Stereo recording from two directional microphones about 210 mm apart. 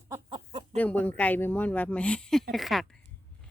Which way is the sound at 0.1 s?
20° right (ahead or behind).